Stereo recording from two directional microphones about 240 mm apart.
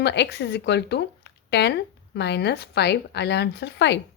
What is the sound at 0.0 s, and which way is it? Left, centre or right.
A woman's voice, left.